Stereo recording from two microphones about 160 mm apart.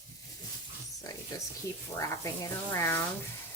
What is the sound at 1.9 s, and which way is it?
Speech, 20° left (ahead or behind).